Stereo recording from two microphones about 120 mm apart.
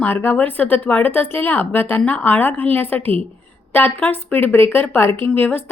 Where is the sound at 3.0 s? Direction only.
55° right (ahead or behind).